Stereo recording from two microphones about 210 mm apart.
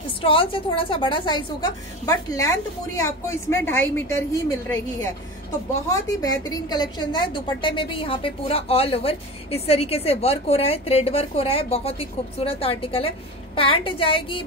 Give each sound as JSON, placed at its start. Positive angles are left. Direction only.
{"t": 0.0, "sound": "a woman's voice", "side_deg": 25}
{"t": 5.9, "sound": "a woman's voice", "side_deg": 15}